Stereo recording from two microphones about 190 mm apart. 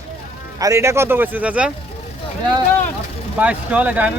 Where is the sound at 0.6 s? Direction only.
15° right (ahead or behind).